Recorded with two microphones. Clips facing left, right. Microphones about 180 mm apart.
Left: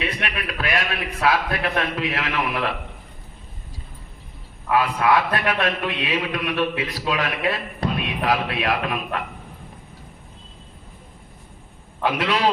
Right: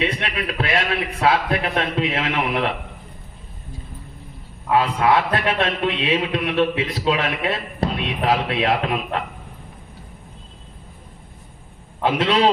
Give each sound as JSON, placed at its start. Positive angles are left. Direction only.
{"t": 0.0, "sound": "a man's voice", "side_deg": -25}
{"t": 4.7, "sound": "a man's voice", "side_deg": -25}
{"t": 12.0, "sound": "a man's voice", "side_deg": -25}